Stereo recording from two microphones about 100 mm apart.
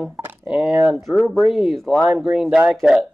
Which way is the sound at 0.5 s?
10° right (ahead or behind).